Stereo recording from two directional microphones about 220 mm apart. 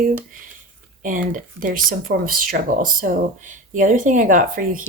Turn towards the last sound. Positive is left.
turn(degrees=-35)  # may be behind; listen again after turning